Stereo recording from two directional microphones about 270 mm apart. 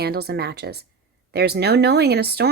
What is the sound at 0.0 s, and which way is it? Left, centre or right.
Speech, right.